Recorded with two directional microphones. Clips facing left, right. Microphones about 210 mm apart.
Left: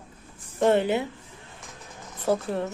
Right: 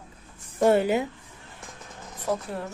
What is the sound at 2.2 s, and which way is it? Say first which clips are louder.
Speech: left 4 dB; 25° left (ahead or behind).